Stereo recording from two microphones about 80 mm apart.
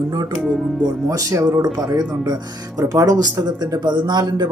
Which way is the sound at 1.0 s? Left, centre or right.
Right.